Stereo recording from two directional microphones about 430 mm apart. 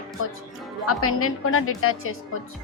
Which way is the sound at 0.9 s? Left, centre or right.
Left.